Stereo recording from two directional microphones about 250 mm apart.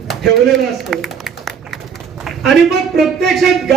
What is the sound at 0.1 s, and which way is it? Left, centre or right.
Speech, centre.